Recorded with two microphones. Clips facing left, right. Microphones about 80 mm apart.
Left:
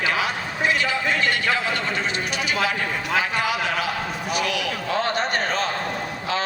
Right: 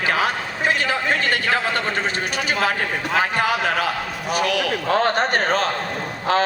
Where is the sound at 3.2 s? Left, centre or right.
Right.